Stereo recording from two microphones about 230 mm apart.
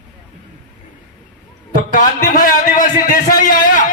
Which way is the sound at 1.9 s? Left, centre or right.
Left.